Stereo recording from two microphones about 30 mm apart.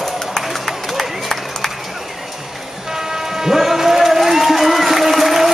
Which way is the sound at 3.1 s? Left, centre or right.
Centre.